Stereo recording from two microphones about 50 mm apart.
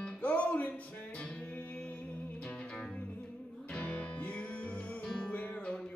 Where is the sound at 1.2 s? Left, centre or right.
Centre.